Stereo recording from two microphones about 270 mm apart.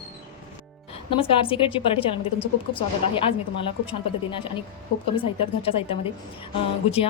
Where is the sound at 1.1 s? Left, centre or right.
Centre.